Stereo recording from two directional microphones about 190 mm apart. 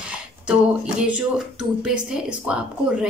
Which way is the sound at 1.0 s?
5° right (ahead or behind).